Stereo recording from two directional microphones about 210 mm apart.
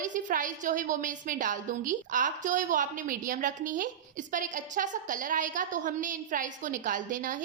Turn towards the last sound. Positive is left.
turn(degrees=-40)  # may be behind; listen again after turning